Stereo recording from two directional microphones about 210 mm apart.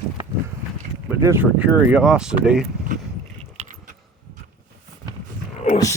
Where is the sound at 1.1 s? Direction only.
10° right (ahead or behind).